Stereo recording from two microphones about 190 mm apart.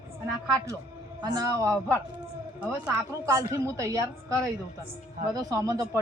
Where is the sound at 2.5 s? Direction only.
5° right (ahead or behind).